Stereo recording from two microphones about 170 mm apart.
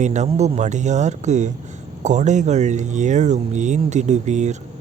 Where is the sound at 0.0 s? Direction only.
45° right (ahead or behind).